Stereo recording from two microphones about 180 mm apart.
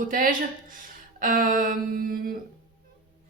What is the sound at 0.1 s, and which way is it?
Speech, 50° right (ahead or behind).